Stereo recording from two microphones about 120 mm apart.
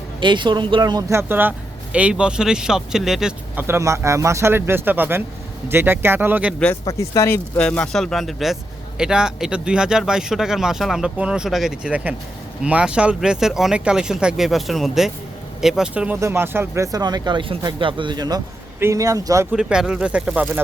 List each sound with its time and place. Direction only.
0.2 s speech: 40° right (ahead or behind)
1.1 s speech: 15° right (ahead or behind)
3.6 s speech: 20° right (ahead or behind)
6.8 s speech: 25° left (ahead or behind); by 16.1 s 10° right (ahead or behind)
16.2 s speech: 20° right (ahead or behind)
19.5 s speech: 5° right (ahead or behind)